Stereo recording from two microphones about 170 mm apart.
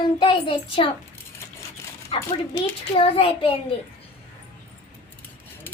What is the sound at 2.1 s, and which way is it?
A child's voice, 35° left (ahead or behind).